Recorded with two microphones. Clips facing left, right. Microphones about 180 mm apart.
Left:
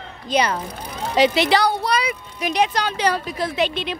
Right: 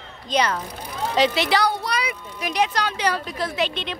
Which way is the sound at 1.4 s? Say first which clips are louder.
Left 3 dB; 25° left (ahead or behind).